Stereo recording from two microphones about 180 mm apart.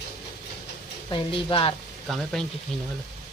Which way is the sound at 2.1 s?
Centre (ahead or behind).